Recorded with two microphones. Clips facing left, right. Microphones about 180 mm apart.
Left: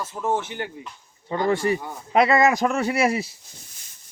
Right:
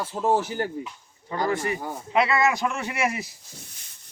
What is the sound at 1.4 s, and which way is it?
Speech, 30° left (ahead or behind).